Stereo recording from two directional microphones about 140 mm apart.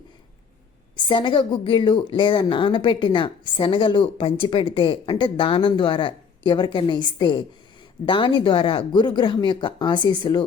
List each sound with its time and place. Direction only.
0.9 s a woman's voice: 35° left (ahead or behind)